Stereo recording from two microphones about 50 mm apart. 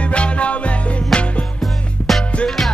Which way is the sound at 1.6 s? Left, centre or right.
Centre.